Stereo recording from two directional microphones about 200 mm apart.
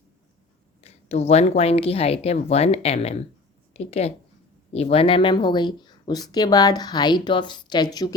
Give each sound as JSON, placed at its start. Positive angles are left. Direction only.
{"t": 0.8, "sound": "speech", "side_deg": 30}